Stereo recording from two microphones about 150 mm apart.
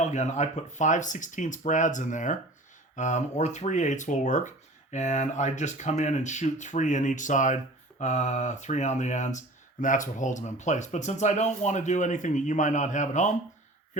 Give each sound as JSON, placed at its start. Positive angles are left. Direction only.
{"t": 0.0, "sound": "speech", "side_deg": 50}